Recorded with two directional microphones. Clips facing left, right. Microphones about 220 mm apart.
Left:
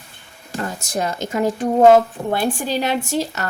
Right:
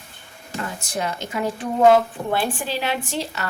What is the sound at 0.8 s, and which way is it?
A woman's voice, 40° left (ahead or behind).